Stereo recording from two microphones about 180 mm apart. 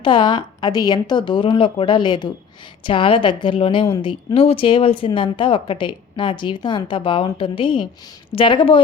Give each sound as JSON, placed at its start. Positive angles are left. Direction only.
{"t": 0.0, "sound": "a woman's voice", "side_deg": 25}